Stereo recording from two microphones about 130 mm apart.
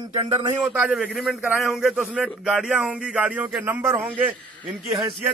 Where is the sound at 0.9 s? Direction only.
Centre (ahead or behind).